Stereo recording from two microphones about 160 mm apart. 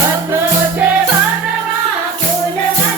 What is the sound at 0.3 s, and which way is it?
Music, 15° right (ahead or behind).